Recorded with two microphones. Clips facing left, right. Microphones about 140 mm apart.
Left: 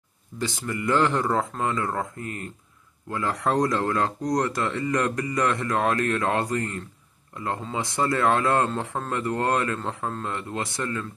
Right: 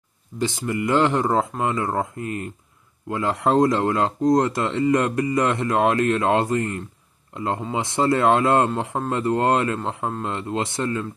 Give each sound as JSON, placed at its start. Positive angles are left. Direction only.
{"t": 0.4, "sound": "speech", "side_deg": -20}